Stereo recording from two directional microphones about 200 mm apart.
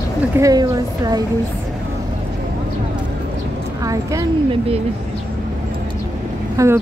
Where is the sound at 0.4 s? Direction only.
20° right (ahead or behind).